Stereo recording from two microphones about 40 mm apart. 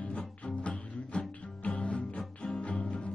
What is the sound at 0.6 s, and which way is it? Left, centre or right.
Music, left.